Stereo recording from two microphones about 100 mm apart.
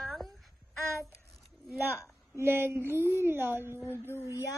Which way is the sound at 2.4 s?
25° right (ahead or behind).